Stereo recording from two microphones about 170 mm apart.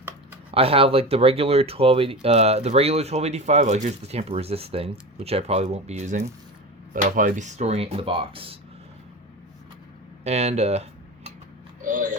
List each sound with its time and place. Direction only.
0.5 s speech: 35° right (ahead or behind)
10.2 s speech: 40° right (ahead or behind)
11.8 s a sound: 50° right (ahead or behind)